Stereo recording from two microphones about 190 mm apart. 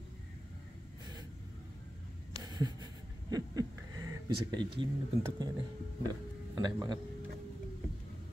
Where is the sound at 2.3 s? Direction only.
20° right (ahead or behind).